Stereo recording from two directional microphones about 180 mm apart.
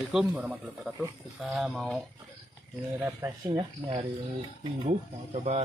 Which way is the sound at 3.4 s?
25° right (ahead or behind).